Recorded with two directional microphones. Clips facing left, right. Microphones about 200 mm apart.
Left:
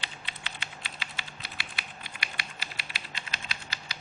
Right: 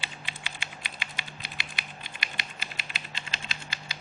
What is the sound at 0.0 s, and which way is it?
Typing, 10° right (ahead or behind).